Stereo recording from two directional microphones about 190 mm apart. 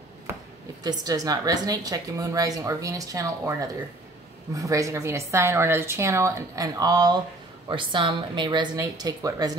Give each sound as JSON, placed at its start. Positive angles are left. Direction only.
{"t": 0.8, "sound": "a woman's voice", "side_deg": -20}